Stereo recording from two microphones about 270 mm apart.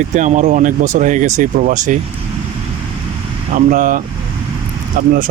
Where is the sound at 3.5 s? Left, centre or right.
Right.